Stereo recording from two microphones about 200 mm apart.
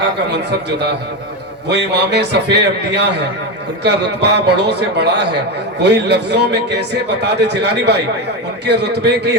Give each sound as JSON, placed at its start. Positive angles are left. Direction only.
{"t": 0.3, "sound": "a man's voice", "side_deg": -60}